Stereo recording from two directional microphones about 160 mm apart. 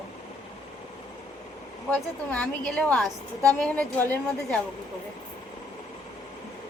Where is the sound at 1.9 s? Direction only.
5° left (ahead or behind).